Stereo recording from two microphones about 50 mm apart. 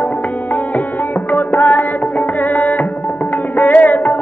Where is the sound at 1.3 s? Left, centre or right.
Left.